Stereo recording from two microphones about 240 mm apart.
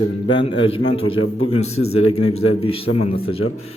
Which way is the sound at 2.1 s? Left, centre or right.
Left.